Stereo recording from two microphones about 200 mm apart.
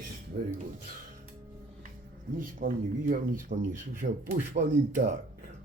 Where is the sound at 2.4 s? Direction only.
45° right (ahead or behind).